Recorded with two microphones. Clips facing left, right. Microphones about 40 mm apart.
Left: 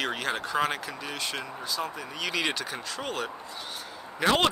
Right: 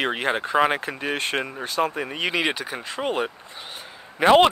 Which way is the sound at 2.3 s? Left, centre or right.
Right.